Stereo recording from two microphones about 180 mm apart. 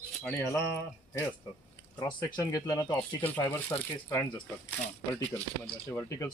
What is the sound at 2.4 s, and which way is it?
Speech, 20° left (ahead or behind).